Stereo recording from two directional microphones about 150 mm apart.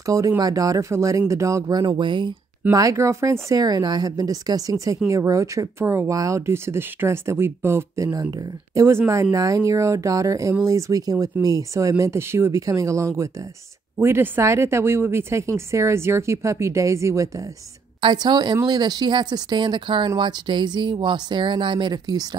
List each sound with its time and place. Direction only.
0.0 s speech: 20° right (ahead or behind)
2.7 s speech: 20° right (ahead or behind)